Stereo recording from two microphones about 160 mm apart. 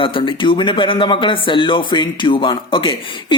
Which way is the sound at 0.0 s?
30° left (ahead or behind).